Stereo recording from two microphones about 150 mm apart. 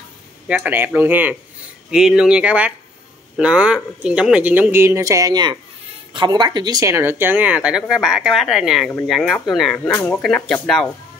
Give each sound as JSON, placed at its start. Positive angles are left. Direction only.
{"t": 0.5, "sound": "speech", "side_deg": -10}